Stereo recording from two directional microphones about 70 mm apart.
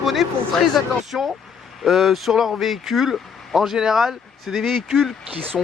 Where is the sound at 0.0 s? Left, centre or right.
Centre.